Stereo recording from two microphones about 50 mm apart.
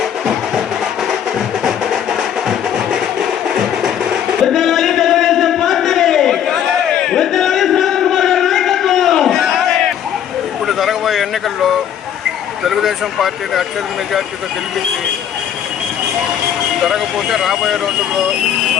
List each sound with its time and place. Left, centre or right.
0.0 s music: centre
1.6 s music: centre
7.0 s a sound: centre
10.7 s vehicle: centre
12.6 s speech: centre
16.8 s speech: centre